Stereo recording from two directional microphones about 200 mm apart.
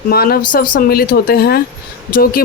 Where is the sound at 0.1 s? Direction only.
50° left (ahead or behind).